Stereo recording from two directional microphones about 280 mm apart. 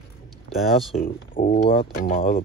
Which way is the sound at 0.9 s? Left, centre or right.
Left.